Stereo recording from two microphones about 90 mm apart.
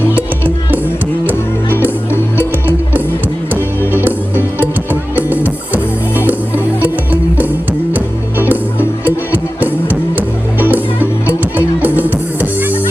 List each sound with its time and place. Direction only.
3.9 s music: 25° right (ahead or behind)